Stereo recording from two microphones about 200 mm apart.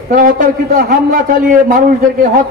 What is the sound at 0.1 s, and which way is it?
A man's voice, 45° right (ahead or behind).